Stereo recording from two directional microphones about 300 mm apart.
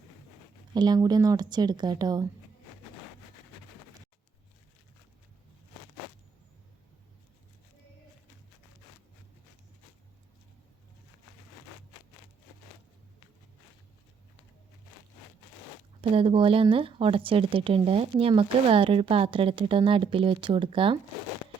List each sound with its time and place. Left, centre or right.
0.7 s speech: centre
16.0 s speech: centre